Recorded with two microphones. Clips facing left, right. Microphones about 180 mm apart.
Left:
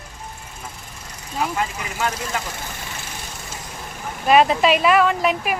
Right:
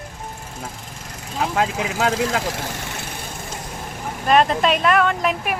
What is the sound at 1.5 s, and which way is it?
Speech, 90° right.